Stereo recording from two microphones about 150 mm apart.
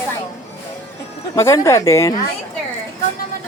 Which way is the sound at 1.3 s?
20° left (ahead or behind).